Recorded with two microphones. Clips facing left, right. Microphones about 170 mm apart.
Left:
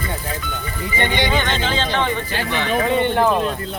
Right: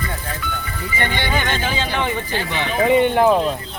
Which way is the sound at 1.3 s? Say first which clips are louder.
Left 1 dB; 10° right (ahead or behind).